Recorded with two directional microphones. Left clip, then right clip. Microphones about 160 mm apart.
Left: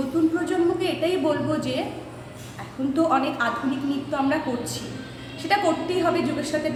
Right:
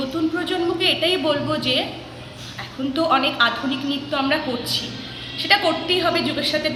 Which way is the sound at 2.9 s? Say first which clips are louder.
Right 3 dB; 5° left (ahead or behind).